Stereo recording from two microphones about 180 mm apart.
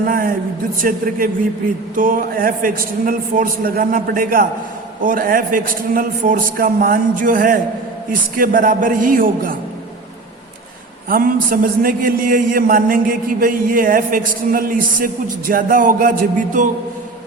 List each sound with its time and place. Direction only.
0.0 s a man's voice: 55° right (ahead or behind)
11.1 s a man's voice: 50° right (ahead or behind)